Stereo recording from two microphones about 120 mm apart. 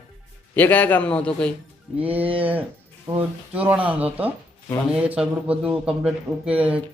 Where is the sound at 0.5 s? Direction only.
15° left (ahead or behind).